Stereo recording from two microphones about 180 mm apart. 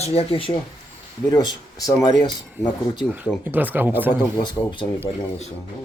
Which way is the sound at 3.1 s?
10° right (ahead or behind).